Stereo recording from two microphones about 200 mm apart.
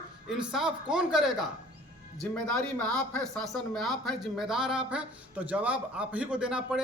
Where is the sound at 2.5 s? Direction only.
5° left (ahead or behind).